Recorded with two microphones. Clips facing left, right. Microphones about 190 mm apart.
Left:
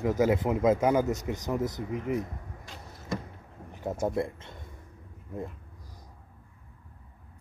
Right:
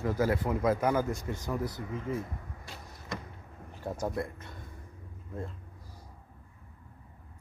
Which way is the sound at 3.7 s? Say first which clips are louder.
Left 4 dB; 20° left (ahead or behind).